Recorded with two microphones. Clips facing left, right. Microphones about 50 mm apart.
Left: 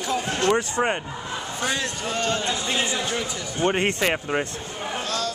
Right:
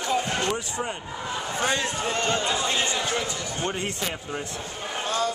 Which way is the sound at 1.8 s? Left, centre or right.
Centre.